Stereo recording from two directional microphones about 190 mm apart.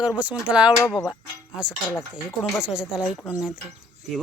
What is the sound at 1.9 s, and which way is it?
Speech, 15° left (ahead or behind).